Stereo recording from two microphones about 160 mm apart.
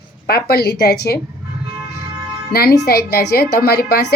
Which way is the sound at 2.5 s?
85° left.